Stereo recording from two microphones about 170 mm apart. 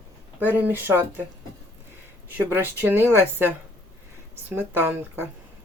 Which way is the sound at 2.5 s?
10° right (ahead or behind).